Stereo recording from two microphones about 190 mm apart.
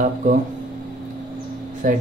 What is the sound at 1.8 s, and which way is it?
Speech, 45° right (ahead or behind).